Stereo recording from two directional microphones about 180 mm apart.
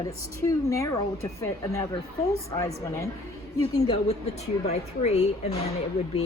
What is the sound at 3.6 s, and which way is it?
A woman's voice, 30° left (ahead or behind).